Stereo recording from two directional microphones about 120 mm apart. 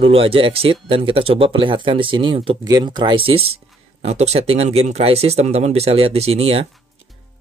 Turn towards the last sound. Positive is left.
turn(degrees=-55)  # may be behind; listen again after turning